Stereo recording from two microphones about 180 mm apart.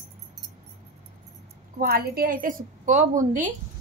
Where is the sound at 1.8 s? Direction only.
55° right (ahead or behind).